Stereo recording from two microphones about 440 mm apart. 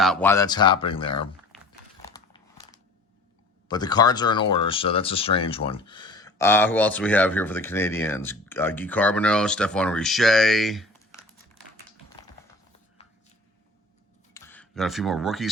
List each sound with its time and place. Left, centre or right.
0.0 s speech: centre
2.0 s biting: centre
3.7 s speech: centre
14.3 s speech: centre